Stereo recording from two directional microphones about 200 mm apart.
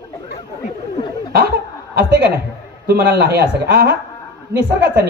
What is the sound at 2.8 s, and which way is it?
Speech, 55° right (ahead or behind).